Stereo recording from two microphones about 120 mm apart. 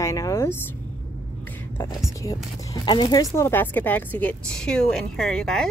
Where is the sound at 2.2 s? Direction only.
30° left (ahead or behind).